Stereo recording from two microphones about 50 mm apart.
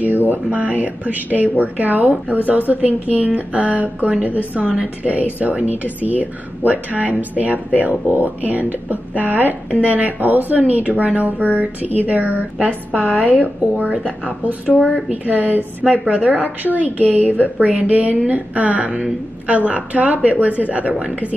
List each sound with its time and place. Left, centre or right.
0.0 s a woman's voice: right
14.7 s speech: centre
15.0 s speech: right
15.8 s a woman's voice: right